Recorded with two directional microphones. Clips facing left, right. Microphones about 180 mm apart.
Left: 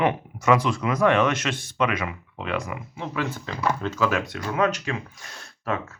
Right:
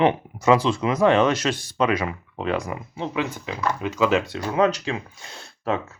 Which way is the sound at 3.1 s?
15° right (ahead or behind).